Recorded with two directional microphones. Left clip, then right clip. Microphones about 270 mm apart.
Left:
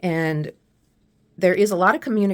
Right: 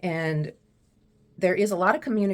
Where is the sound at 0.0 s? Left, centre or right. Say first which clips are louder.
Left 5 dB; left.